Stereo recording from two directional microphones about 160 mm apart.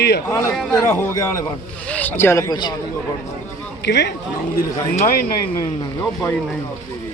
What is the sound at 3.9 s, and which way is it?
Speech, 90° left.